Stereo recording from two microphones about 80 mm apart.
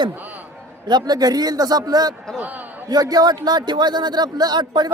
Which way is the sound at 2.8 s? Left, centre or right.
Right.